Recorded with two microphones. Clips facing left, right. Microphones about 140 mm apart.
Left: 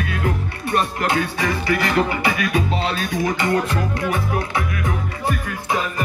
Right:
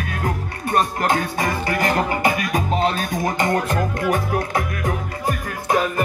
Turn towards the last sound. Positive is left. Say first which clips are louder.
# even
turn(degrees=-45)  # may be behind; listen again after turning